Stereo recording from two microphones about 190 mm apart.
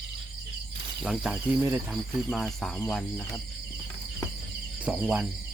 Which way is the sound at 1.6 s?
10° right (ahead or behind).